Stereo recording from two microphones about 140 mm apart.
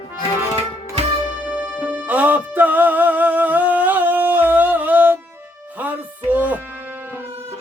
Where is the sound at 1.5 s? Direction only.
10° right (ahead or behind).